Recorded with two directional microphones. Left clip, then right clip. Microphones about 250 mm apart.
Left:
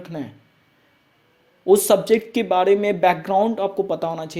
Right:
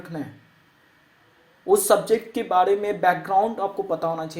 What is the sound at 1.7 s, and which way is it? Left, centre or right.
Speech, left.